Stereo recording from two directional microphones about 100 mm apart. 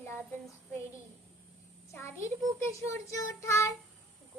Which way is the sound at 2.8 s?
30° left (ahead or behind).